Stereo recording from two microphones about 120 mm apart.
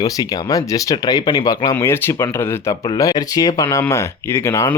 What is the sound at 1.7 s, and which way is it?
Speech, 20° left (ahead or behind).